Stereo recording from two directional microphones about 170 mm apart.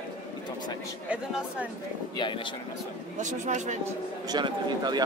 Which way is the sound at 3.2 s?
45° right (ahead or behind).